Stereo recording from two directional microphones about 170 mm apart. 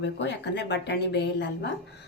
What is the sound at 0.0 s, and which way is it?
Speech, 85° left.